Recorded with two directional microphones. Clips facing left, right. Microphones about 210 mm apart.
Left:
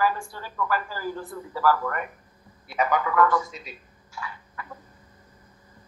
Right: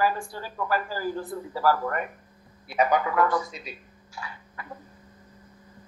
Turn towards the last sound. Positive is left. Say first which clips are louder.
# left 2 dB
turn(degrees=-35)  # may be behind; listen again after turning